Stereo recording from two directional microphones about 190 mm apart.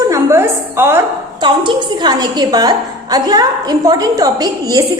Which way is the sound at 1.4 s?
25° right (ahead or behind).